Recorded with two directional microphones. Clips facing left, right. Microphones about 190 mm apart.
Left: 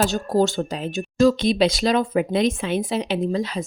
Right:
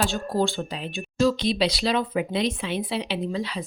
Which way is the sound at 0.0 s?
40° left (ahead or behind).